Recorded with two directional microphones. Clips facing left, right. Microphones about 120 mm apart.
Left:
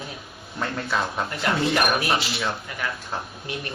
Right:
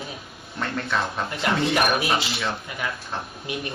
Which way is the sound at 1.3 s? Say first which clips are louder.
Right 1 dB; centre (ahead or behind).